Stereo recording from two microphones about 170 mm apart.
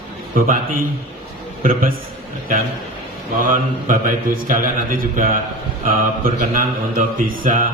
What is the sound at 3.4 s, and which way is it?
A man's voice, 55° right (ahead or behind).